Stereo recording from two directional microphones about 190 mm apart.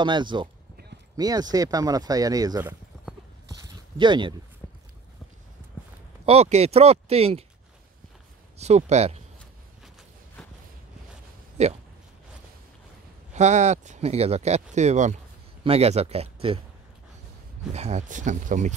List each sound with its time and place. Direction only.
0.0 s speech: 25° right (ahead or behind)
3.6 s clip-clop: 25° right (ahead or behind)
4.6 s a sound: 15° left (ahead or behind)
6.2 s speech: 35° right (ahead or behind)
8.5 s speech: 35° right (ahead or behind)
11.6 s speech: 35° right (ahead or behind)
13.3 s speech: 40° right (ahead or behind)
17.7 s speech: 35° right (ahead or behind)